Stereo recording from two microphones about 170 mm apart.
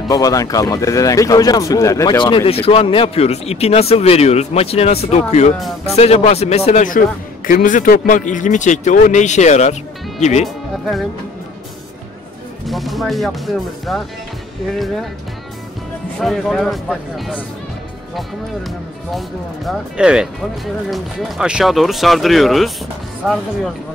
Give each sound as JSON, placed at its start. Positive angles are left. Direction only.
{"t": 0.1, "sound": "a man's voice", "side_deg": 20}
{"t": 10.4, "sound": "speech", "side_deg": 0}
{"t": 12.6, "sound": "speech", "side_deg": 0}
{"t": 14.7, "sound": "speech", "side_deg": 0}
{"t": 16.2, "sound": "speech", "side_deg": 0}
{"t": 19.1, "sound": "speech", "side_deg": 0}